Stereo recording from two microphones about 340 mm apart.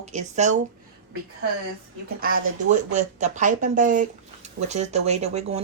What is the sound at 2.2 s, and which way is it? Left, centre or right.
Speech, right.